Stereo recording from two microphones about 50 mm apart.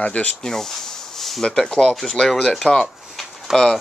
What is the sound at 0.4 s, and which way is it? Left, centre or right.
Speech, centre.